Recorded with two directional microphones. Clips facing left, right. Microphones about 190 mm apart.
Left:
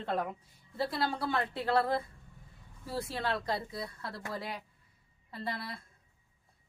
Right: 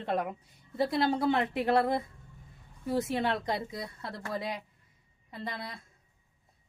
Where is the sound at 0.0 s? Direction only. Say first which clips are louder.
Right 2 dB; 20° right (ahead or behind).